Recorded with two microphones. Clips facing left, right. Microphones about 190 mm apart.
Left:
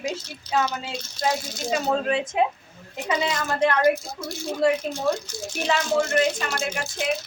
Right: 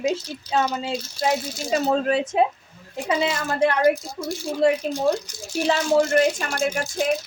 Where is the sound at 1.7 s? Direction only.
35° right (ahead or behind).